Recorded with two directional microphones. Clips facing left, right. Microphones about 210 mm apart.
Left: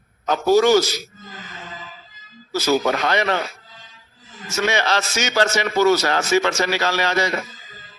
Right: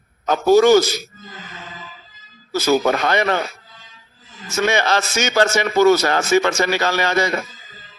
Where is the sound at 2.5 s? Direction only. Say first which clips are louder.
Right 2 dB; 50° right (ahead or behind).